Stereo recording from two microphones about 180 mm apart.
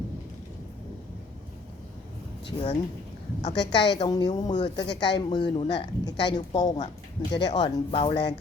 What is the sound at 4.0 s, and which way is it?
A woman's voice, 20° left (ahead or behind).